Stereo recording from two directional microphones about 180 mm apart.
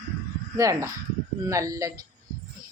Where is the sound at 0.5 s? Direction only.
15° right (ahead or behind).